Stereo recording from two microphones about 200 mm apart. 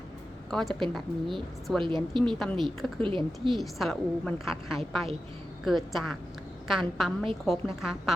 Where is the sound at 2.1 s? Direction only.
25° right (ahead or behind).